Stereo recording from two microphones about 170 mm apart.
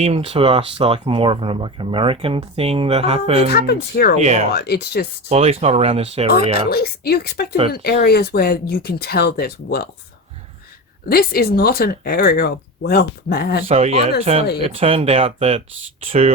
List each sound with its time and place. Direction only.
0.0 s speech: 35° right (ahead or behind)
3.5 s speech: 65° left (ahead or behind)
4.2 s speech: 45° right (ahead or behind)
4.5 s speech: 70° left (ahead or behind)
5.3 s speech: 35° right (ahead or behind)
6.7 s speech: 65° left (ahead or behind)
11.1 s speech: 60° left (ahead or behind)
13.7 s speech: 40° right (ahead or behind)